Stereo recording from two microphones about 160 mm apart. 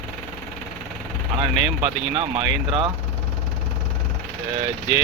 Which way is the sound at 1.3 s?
30° right (ahead or behind).